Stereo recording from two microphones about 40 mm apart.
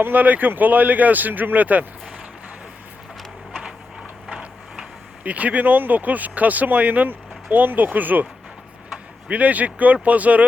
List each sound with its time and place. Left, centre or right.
0.0 s speech: right
5.2 s speech: right
9.3 s speech: right